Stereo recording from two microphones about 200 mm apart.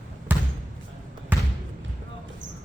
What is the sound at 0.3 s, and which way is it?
Basketball bounce, 10° right (ahead or behind).